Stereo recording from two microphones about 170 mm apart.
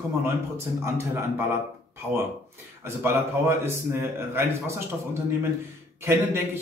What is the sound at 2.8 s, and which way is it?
Speech, 15° right (ahead or behind).